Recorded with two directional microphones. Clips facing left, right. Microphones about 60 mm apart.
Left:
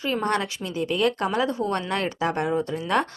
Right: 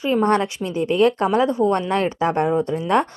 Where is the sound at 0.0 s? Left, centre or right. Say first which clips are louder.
Right 7 dB; right.